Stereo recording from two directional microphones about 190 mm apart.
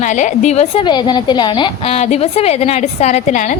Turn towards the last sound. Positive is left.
turn(degrees=40)  # may be behind; listen again after turning